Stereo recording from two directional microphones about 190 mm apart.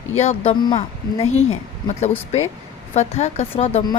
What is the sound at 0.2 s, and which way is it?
Speech, 30° left (ahead or behind).